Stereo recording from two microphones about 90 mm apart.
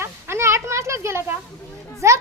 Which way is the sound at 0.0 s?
30° right (ahead or behind).